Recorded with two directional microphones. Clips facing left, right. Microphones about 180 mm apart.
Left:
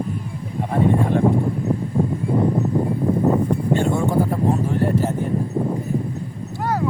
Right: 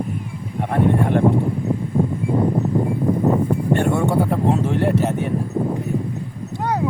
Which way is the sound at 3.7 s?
65° right (ahead or behind).